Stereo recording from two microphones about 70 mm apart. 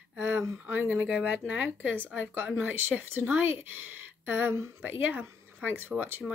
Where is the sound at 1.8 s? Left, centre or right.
Right.